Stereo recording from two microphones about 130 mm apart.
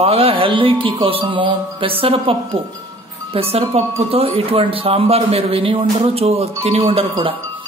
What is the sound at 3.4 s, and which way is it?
Speech, 50° right (ahead or behind).